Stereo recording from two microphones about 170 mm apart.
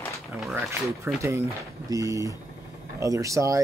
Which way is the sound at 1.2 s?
15° right (ahead or behind).